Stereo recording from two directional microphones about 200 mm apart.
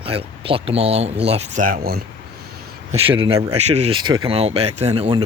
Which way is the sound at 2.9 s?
25° right (ahead or behind).